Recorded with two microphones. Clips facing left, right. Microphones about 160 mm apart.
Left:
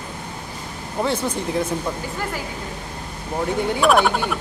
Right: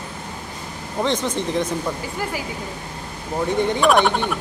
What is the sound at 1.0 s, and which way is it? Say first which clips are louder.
Speech: right 1 dB; 10° left (ahead or behind).